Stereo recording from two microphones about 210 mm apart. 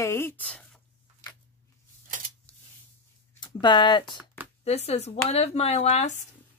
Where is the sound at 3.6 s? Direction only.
20° left (ahead or behind).